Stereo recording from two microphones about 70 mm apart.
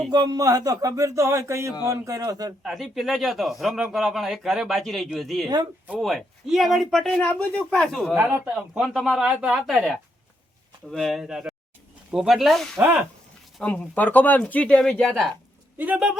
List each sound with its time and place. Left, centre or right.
0.1 s speech: right
2.6 s speech: centre
8.1 s speech: right
8.7 s speech: centre
9.2 s speech: centre
9.6 s speech: centre
10.9 s speech: centre
11.2 s speech: centre
13.6 s speech: centre
16.1 s speech: centre